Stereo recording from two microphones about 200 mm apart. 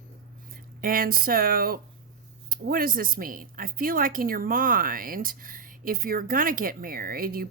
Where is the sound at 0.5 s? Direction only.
45° right (ahead or behind).